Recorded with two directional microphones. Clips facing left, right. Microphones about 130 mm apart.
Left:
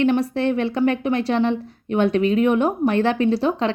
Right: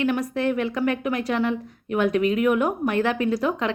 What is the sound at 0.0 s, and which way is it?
Speech, 30° left (ahead or behind).